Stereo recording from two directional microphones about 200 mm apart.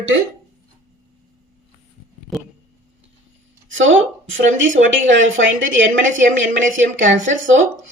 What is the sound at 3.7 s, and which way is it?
A woman's voice, 70° right (ahead or behind).